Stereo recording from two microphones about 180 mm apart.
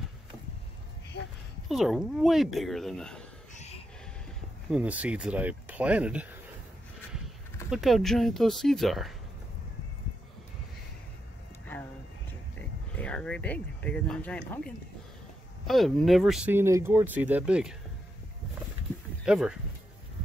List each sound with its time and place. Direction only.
1.7 s speech: centre (ahead or behind)
3.5 s a sound: 35° left (ahead or behind)
4.6 s speech: 5° right (ahead or behind)
7.7 s speech: centre (ahead or behind)
12.9 s speech: 5° left (ahead or behind)
15.6 s speech: centre (ahead or behind)
19.2 s speech: 5° right (ahead or behind)